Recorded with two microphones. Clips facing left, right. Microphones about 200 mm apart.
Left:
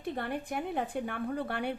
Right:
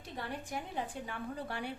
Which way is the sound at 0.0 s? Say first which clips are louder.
Left 7 dB; 60° left (ahead or behind).